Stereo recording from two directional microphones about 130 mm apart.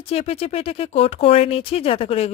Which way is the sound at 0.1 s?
50° left (ahead or behind).